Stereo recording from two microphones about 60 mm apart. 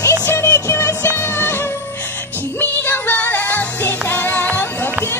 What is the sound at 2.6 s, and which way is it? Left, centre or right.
Music, left.